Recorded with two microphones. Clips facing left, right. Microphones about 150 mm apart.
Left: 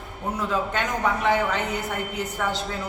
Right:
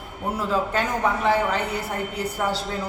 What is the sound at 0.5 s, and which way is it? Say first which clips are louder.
A woman's voice: right 3 dB; 35° right (ahead or behind).